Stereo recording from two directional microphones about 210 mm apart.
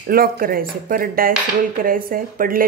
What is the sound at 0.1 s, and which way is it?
Speech, 45° right (ahead or behind).